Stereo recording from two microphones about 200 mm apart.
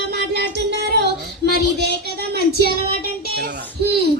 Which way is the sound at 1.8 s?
55° right (ahead or behind).